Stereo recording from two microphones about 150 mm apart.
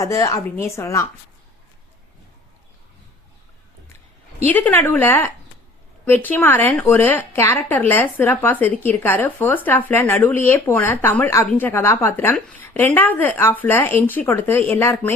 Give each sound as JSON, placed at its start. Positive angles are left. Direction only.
{"t": 0.0, "sound": "a woman's voice", "side_deg": 20}
{"t": 4.4, "sound": "speech", "side_deg": 10}